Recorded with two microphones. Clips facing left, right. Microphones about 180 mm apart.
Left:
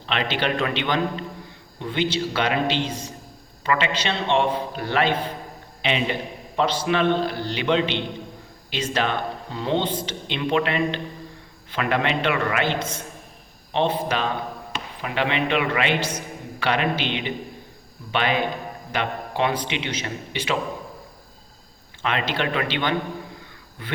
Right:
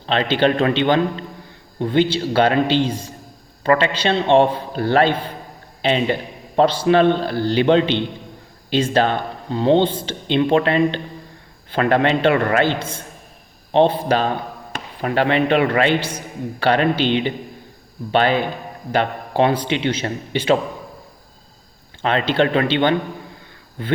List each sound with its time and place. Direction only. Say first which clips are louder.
0.0 s a man's voice: right 8 dB; 35° right (ahead or behind)
22.0 s speech: right 7 dB; 30° right (ahead or behind)